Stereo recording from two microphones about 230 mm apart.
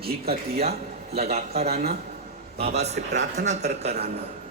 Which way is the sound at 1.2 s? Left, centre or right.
Right.